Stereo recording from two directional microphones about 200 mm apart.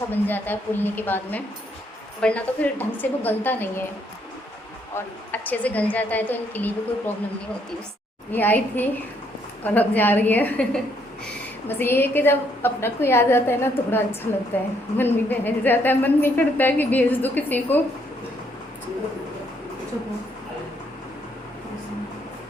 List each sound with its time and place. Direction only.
0.1 s a woman's voice: 10° left (ahead or behind)
4.9 s a woman's voice: 10° left (ahead or behind)
8.3 s a woman's voice: 10° left (ahead or behind)